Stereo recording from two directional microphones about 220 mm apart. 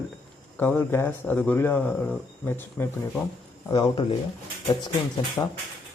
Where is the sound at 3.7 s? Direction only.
20° left (ahead or behind).